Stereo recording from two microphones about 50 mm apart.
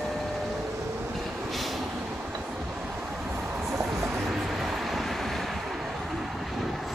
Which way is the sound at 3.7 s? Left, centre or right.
Right.